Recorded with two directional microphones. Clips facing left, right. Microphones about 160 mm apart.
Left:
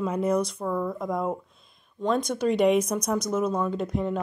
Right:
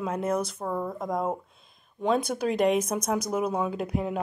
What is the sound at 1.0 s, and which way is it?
Speech, centre (ahead or behind).